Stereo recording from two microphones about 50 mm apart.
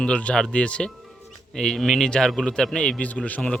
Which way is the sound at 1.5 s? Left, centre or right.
Centre.